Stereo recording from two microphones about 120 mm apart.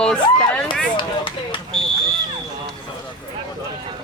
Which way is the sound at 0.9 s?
45° left (ahead or behind).